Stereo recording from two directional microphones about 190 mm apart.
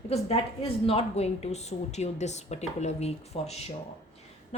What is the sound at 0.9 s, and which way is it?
A woman's voice, 30° left (ahead or behind).